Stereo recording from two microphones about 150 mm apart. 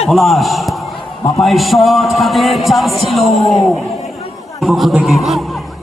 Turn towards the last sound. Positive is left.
turn(degrees=0)  # may be behind; listen again after turning